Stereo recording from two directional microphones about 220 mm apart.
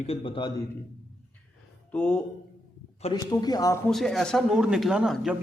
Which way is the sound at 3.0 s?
20° left (ahead or behind).